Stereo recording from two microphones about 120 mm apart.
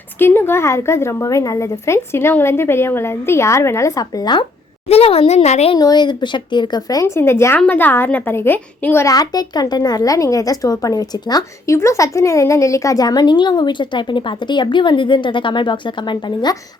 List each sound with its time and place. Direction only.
0.2 s a woman's voice: 20° left (ahead or behind); by 4.4 s 35° left (ahead or behind)
4.9 s speech: 55° left (ahead or behind)
5.7 s a child's voice: 35° left (ahead or behind)
7.2 s a woman's voice: 20° left (ahead or behind); by 16.6 s 40° left (ahead or behind)